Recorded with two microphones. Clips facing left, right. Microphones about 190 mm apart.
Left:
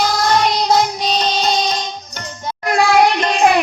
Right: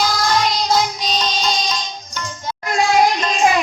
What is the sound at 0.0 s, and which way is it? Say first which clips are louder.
Music: left 3 dB; 60° left (ahead or behind).